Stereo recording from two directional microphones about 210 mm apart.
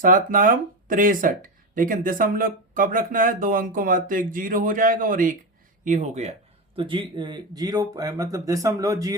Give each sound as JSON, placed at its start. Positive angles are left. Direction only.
{"t": 0.0, "sound": "speech", "side_deg": -40}